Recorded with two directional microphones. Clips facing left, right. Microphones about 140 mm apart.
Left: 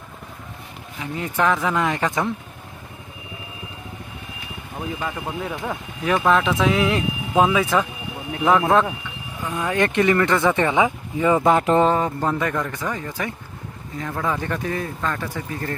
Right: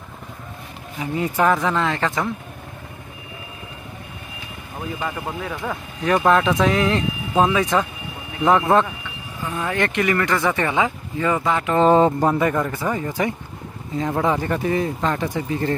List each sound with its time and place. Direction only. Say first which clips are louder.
1.2 s speech: right 2 dB; 10° right (ahead or behind)
1.6 s speech: even; 10° left (ahead or behind)
5.4 s speech: even; 10° left (ahead or behind)
9.4 s speech: left 1 dB; 10° left (ahead or behind)
11.4 s a sound: left 5 dB; 40° left (ahead or behind)
11.9 s speech: right 6 dB; 20° right (ahead or behind)
13.9 s speech: right 5 dB; 25° right (ahead or behind)
14.4 s speech: right 5 dB; 10° right (ahead or behind)